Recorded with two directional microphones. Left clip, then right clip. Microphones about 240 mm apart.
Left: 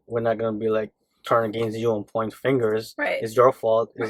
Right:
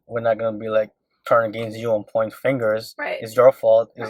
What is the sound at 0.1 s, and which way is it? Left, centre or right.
Speech, centre.